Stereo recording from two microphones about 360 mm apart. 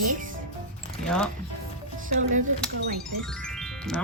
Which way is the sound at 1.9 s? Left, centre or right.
Right.